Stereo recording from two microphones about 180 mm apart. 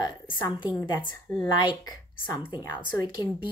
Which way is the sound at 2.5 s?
20° left (ahead or behind).